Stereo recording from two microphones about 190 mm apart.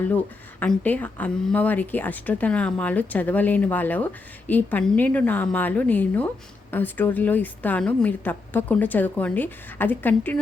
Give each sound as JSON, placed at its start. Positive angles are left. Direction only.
{"t": 0.6, "sound": "speech", "side_deg": 10}